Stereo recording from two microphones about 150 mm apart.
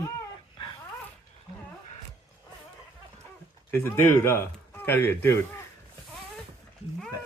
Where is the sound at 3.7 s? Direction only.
15° left (ahead or behind).